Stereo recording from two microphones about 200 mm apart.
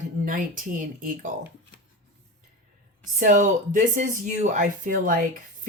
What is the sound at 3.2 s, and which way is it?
Speech, 40° right (ahead or behind).